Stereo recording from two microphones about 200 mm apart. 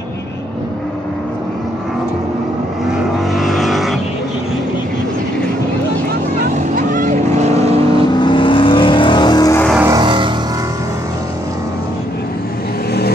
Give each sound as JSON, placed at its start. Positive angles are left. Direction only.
{"t": 2.9, "sound": "vehicle", "side_deg": 0}
{"t": 6.7, "sound": "vehicle", "side_deg": -40}
{"t": 8.1, "sound": "vehicle", "side_deg": 25}
{"t": 9.8, "sound": "music", "side_deg": -15}
{"t": 10.0, "sound": "music", "side_deg": -25}